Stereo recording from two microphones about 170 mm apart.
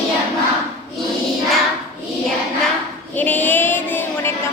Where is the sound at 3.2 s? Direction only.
10° left (ahead or behind).